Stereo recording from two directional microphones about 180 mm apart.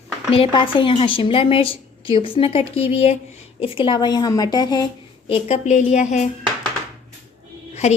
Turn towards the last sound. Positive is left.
turn(degrees=35)  # may be behind; listen again after turning